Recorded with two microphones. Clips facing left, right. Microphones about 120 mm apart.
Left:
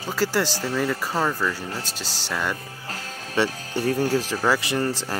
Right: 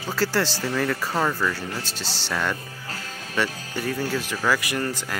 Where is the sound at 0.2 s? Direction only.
15° left (ahead or behind).